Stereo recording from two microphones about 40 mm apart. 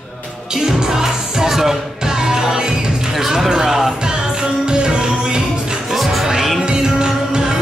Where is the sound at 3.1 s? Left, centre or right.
Centre; by 5.8 s right.